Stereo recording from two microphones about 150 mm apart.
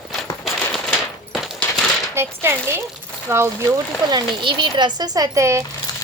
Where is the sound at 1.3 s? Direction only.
Centre (ahead or behind).